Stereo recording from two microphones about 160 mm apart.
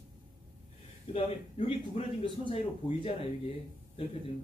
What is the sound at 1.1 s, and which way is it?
A man's voice, 35° left (ahead or behind).